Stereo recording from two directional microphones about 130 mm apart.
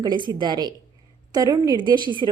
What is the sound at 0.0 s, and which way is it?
A woman's voice, 35° right (ahead or behind).